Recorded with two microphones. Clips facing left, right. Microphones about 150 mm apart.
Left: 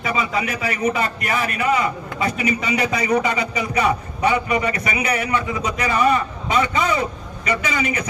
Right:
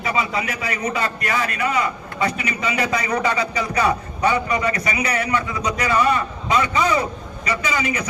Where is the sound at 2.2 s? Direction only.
25° left (ahead or behind).